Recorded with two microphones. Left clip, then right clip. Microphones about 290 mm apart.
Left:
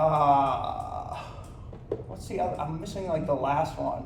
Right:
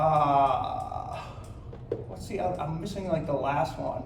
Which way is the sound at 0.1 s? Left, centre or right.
Centre.